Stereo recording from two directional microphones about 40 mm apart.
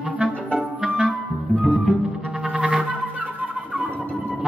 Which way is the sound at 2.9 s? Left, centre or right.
Right.